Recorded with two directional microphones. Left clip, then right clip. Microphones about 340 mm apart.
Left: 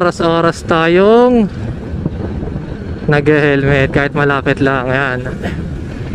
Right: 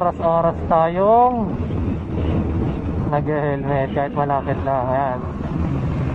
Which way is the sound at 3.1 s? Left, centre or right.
Left.